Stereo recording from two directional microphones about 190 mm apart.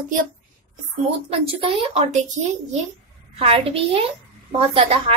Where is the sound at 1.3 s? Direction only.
30° right (ahead or behind).